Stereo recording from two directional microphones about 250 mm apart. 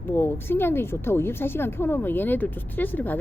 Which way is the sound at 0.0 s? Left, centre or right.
Centre.